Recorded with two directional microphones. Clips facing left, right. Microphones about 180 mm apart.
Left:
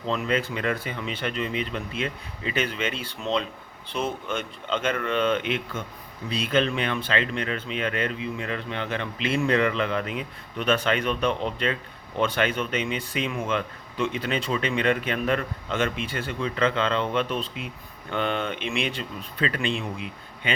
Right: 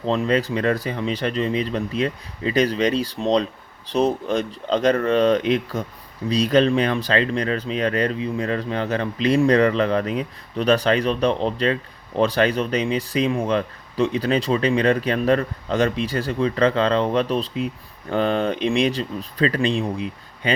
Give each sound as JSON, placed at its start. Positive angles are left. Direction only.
{"t": 0.0, "sound": "speech", "side_deg": -35}